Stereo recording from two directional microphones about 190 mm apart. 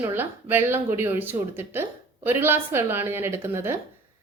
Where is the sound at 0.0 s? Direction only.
10° right (ahead or behind).